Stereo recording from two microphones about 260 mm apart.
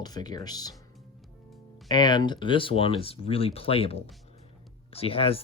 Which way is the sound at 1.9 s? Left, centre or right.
Centre.